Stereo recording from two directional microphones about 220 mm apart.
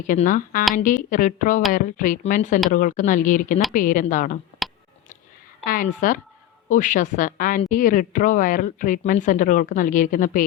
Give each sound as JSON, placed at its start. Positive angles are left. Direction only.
{"t": 0.1, "sound": "a woman's voice", "side_deg": 35}
{"t": 4.6, "sound": "a sound", "side_deg": 0}
{"t": 5.6, "sound": "a woman's voice", "side_deg": 40}